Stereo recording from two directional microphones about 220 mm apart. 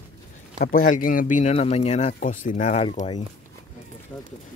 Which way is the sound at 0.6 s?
40° left (ahead or behind).